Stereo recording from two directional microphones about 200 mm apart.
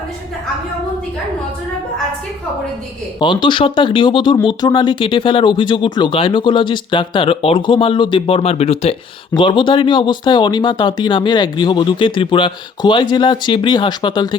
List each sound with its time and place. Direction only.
3.2 s speech: 25° left (ahead or behind)